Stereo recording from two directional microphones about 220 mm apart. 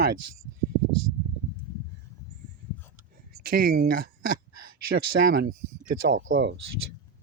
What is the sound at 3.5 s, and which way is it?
Speech, 40° right (ahead or behind).